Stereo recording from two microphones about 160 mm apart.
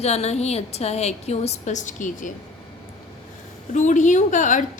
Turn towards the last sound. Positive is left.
turn(degrees=50)  # may be behind; listen again after turning